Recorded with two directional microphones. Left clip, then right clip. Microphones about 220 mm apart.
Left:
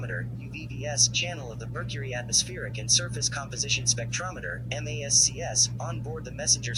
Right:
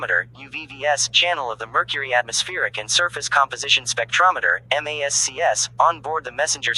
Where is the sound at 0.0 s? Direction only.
40° right (ahead or behind).